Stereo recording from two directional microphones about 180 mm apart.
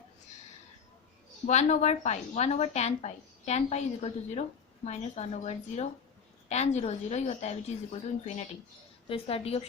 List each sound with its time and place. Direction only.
1.5 s a woman's voice: 40° left (ahead or behind)